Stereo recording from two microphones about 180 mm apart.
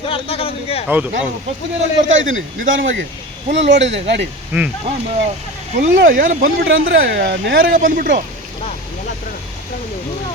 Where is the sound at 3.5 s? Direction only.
80° right.